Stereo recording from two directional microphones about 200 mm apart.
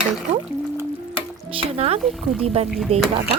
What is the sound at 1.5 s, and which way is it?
A woman's voice, 30° right (ahead or behind).